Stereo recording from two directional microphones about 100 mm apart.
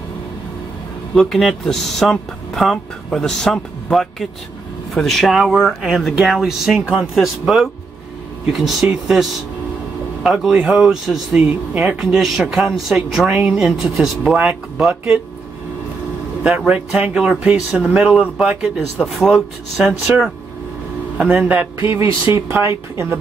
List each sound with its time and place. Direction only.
1.1 s speech: 5° left (ahead or behind)
13.3 s speech: 15° right (ahead or behind)
16.4 s speech: 15° right (ahead or behind)
18.8 s speech: centre (ahead or behind)
19.3 s speech: 10° right (ahead or behind)
21.8 s speech: 25° right (ahead or behind)